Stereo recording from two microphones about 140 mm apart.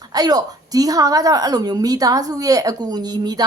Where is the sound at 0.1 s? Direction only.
30° right (ahead or behind).